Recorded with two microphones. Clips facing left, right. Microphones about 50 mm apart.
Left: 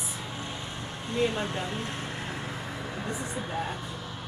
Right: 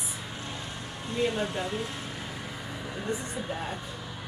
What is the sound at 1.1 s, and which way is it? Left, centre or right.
Speech, left.